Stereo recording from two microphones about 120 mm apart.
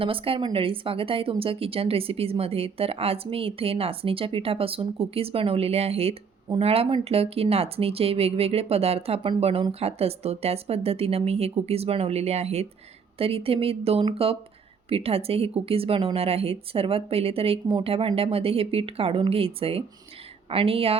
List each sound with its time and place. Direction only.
0.0 s speech: 50° right (ahead or behind)
13.1 s speech: 50° right (ahead or behind)